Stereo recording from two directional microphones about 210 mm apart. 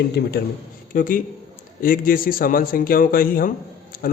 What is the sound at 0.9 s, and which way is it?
A man's voice, 40° left (ahead or behind).